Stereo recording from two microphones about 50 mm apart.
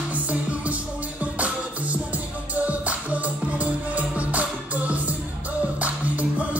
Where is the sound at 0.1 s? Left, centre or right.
Right.